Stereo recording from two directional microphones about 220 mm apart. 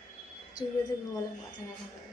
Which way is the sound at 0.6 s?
20° left (ahead or behind).